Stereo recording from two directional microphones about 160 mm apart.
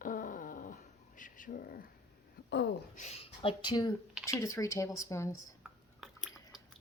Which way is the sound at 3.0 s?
40° left (ahead or behind).